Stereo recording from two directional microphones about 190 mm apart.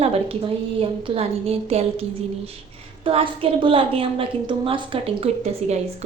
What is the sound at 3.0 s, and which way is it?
A woman's voice, 30° right (ahead or behind).